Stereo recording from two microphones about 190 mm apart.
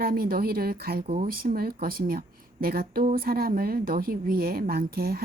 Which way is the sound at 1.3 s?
50° right (ahead or behind).